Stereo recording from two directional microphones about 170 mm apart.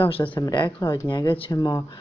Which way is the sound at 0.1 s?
30° left (ahead or behind).